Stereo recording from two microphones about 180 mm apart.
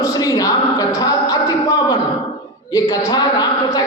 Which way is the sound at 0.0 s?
20° left (ahead or behind).